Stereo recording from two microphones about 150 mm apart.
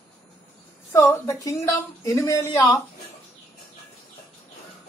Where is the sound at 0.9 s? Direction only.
20° left (ahead or behind).